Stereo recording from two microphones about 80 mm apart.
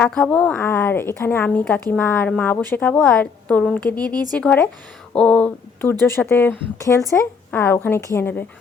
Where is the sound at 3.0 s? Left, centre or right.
Centre.